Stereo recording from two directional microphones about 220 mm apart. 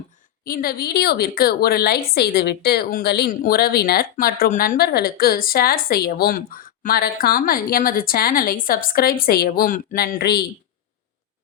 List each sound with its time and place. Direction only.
0.4 s a woman's voice: 40° left (ahead or behind)